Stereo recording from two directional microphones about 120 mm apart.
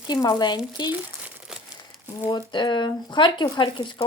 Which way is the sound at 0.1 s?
35° left (ahead or behind).